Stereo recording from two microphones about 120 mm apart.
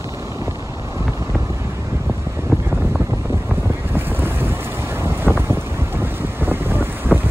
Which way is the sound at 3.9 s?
20° right (ahead or behind).